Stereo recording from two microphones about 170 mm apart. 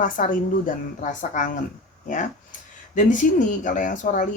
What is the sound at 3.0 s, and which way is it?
Speech, 50° left (ahead or behind).